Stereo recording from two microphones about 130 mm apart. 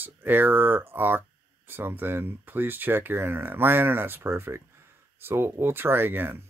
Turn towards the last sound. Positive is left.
turn(degrees=-15)  # may be behind; listen again after turning